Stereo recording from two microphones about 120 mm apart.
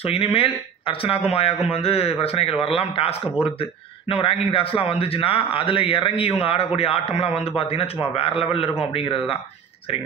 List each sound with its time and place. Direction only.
0.0 s a man's voice: 55° left (ahead or behind)